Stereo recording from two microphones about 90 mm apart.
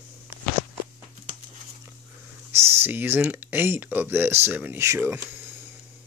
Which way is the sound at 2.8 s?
25° right (ahead or behind).